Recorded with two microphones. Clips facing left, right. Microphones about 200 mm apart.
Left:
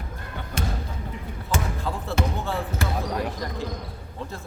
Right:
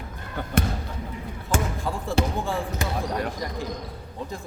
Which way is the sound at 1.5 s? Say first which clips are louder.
Right 2 dB; 50° right (ahead or behind).